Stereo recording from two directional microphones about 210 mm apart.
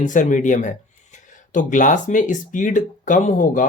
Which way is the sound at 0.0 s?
35° left (ahead or behind).